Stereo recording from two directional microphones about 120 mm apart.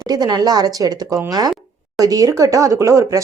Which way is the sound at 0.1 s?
35° right (ahead or behind).